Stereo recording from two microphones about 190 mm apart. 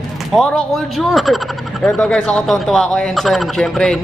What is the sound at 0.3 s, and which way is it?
Speech, centre (ahead or behind).